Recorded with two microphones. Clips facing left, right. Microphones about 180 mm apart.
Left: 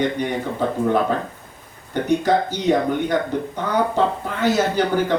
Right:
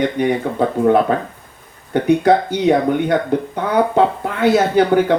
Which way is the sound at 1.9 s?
60° right (ahead or behind).